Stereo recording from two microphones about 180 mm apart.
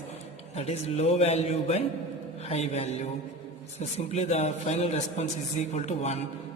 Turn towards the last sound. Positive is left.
turn(degrees=35)  # may be behind; listen again after turning